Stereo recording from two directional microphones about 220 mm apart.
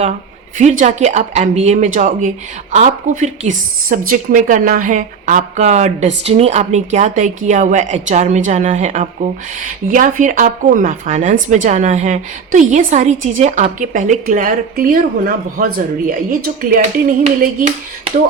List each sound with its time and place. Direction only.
0.6 s a woman's voice: 35° right (ahead or behind)